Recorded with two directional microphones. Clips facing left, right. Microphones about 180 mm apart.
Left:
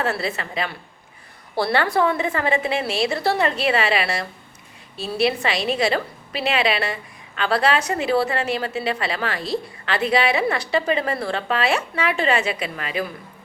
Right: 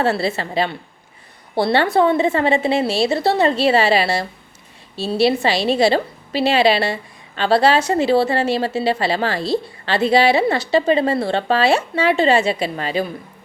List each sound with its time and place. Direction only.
0.0 s a woman's voice: 30° right (ahead or behind)